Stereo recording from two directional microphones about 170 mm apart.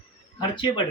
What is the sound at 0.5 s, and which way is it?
Speech, 25° left (ahead or behind).